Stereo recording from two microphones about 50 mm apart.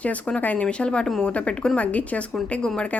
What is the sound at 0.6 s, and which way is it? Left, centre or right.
A woman's voice, left.